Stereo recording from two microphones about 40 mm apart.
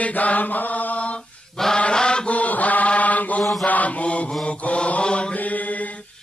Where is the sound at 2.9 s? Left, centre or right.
Left.